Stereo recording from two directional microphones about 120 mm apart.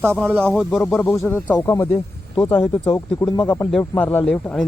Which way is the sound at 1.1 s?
20° left (ahead or behind).